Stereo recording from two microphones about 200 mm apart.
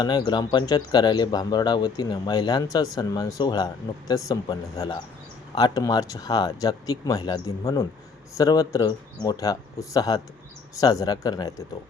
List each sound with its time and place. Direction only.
0.0 s speech: 20° left (ahead or behind)